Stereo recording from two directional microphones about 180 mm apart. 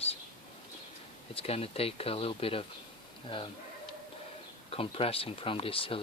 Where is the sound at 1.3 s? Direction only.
35° left (ahead or behind).